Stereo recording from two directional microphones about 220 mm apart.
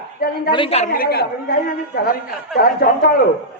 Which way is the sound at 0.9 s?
45° left (ahead or behind).